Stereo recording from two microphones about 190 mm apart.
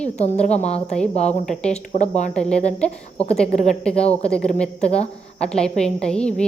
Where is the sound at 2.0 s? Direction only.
40° left (ahead or behind).